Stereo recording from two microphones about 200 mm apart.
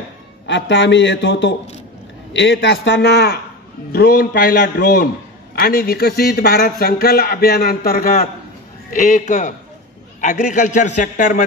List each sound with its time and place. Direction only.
0.5 s a man's voice: 65° left (ahead or behind); by 8.3 s 45° left (ahead or behind)
8.9 s a man's voice: 35° left (ahead or behind)